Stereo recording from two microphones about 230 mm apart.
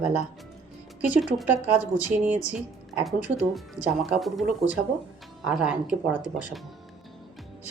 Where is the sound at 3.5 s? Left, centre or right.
Centre.